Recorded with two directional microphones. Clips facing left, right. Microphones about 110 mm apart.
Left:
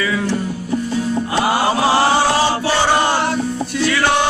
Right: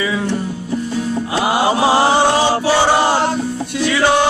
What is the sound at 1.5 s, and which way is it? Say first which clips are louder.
Chant: right 3 dB; 20° right (ahead or behind).